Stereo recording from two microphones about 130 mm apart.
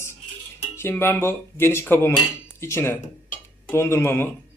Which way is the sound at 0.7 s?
20° left (ahead or behind).